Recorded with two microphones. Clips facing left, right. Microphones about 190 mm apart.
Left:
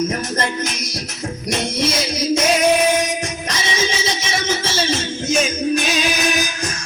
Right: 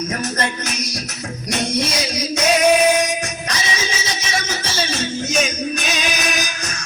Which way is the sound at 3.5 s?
25° left (ahead or behind).